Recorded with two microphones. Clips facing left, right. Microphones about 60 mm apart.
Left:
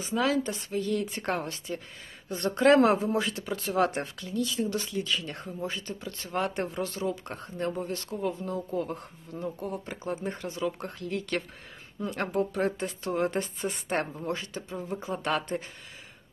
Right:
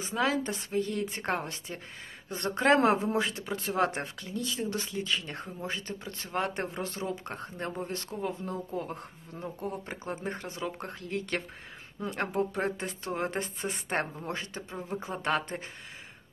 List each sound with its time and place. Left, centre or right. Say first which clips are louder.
0.1 s speech: left 2 dB; right